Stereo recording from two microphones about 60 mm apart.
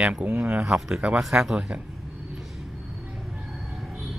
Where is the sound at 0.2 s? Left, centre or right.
Centre.